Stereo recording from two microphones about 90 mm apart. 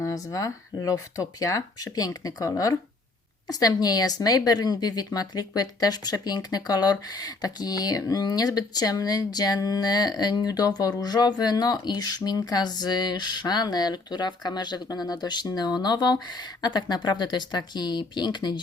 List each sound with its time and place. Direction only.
0.0 s speech: 40° left (ahead or behind); by 18.6 s 55° left (ahead or behind)